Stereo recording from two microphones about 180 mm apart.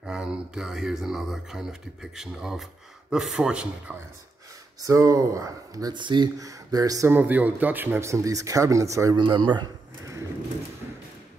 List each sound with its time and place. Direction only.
0.0 s speech: 5° right (ahead or behind)
4.8 s speech: 20° right (ahead or behind)